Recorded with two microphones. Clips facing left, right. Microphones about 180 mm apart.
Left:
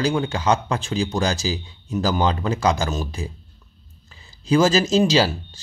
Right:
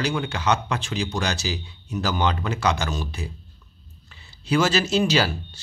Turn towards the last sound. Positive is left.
turn(degrees=35)  # may be behind; listen again after turning